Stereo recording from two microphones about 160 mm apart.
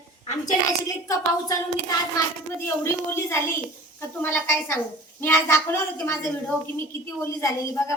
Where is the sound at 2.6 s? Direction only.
15° left (ahead or behind).